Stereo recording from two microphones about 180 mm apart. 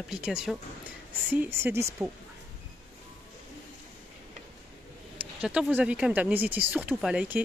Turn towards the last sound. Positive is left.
turn(degrees=-10)  # may be behind; listen again after turning